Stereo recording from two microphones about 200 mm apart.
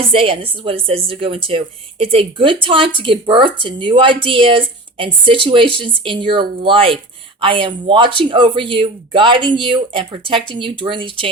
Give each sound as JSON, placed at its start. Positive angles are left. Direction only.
{"t": 0.0, "sound": "speech", "side_deg": -25}